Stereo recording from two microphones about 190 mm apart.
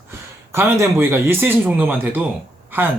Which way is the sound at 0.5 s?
10° right (ahead or behind).